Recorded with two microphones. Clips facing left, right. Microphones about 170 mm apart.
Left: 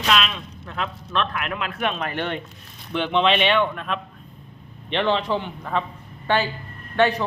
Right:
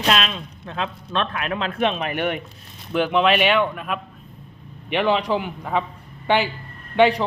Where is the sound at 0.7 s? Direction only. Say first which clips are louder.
Right 1 dB; 25° right (ahead or behind).